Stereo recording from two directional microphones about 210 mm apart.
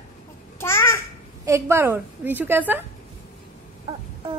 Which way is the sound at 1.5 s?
15° right (ahead or behind).